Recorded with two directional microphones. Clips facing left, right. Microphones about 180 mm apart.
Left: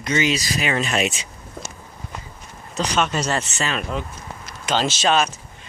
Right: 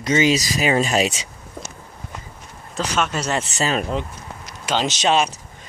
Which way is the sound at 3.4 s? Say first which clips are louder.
Right 4 dB; 35° right (ahead or behind).